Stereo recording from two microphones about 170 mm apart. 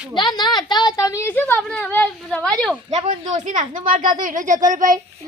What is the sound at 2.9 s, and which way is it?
Speech, 45° right (ahead or behind).